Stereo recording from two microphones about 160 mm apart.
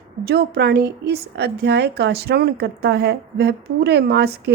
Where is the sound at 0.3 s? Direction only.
85° right.